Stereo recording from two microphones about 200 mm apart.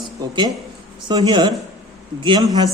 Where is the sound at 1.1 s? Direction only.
20° right (ahead or behind).